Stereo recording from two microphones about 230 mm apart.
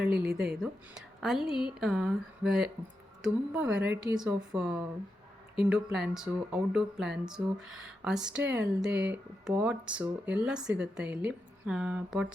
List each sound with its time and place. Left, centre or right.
0.1 s speech: right
0.5 s speech: centre
3.9 s speech: centre
4.4 s speech: centre